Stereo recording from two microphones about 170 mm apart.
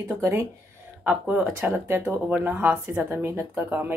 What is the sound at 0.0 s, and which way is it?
Speech, 15° right (ahead or behind).